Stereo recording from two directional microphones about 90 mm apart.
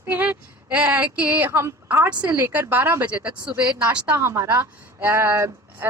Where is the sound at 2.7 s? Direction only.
20° right (ahead or behind).